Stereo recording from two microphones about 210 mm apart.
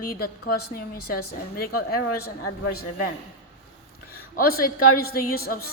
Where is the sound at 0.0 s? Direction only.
45° left (ahead or behind).